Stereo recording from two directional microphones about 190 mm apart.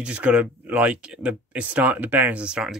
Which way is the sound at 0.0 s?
5° right (ahead or behind).